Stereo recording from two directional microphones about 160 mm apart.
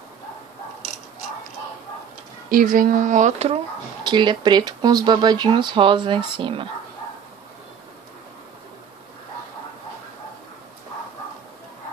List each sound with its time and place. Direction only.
2.5 s speech: 60° right (ahead or behind); by 3.6 s 40° right (ahead or behind)
4.0 s speech: 30° right (ahead or behind)